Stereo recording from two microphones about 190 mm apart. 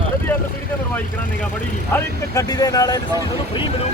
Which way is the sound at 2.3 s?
20° left (ahead or behind).